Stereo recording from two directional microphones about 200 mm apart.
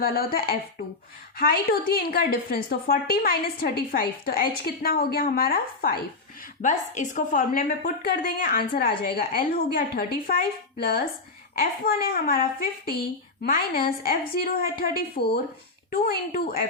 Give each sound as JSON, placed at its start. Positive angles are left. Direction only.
{"t": 0.0, "sound": "a woman's voice", "side_deg": 45}